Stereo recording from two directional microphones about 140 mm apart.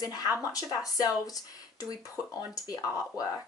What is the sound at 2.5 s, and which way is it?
Speech, 25° left (ahead or behind).